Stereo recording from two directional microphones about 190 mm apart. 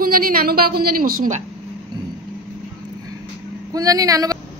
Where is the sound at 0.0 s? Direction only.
50° right (ahead or behind).